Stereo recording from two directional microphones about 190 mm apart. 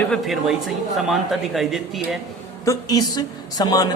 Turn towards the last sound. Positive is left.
turn(degrees=20)  # may be behind; listen again after turning